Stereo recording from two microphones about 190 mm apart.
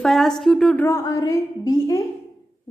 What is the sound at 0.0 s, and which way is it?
Speech, centre (ahead or behind).